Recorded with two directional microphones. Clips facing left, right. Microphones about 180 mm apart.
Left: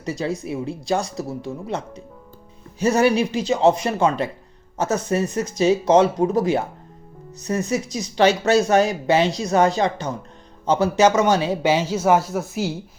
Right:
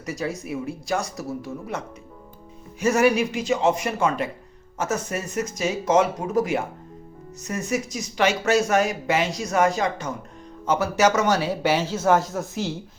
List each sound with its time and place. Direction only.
0.0 s speech: 30° left (ahead or behind); by 12.7 s 10° left (ahead or behind)